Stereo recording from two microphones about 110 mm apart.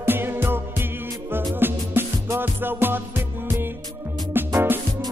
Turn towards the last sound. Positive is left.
turn(degrees=-20)  # may be behind; listen again after turning